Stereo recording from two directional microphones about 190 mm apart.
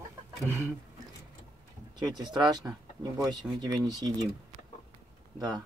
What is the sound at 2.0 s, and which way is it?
Speech, 20° right (ahead or behind).